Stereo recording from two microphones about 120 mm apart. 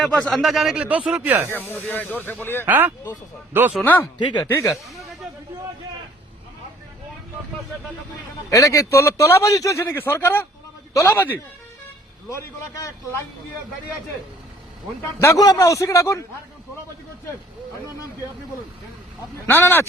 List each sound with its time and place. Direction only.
0.0 s speech: 5° left (ahead or behind); by 1.5 s 15° right (ahead or behind)
1.5 s a man's voice: 15° left (ahead or behind)
2.6 s speech: 15° right (ahead or behind)
4.2 s speech: 40° left (ahead or behind)
4.4 s a man's voice: 25° left (ahead or behind)
8.4 s a man's voice: 25° left (ahead or behind)
15.2 s a man's voice: 30° left (ahead or behind)
19.5 s speech: 20° left (ahead or behind)